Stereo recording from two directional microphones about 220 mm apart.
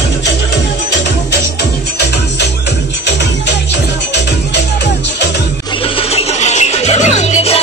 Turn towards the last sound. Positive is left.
turn(degrees=30)  # may be behind; listen again after turning